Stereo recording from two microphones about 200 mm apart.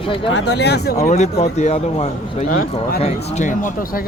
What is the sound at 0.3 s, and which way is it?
Speech, 55° left (ahead or behind).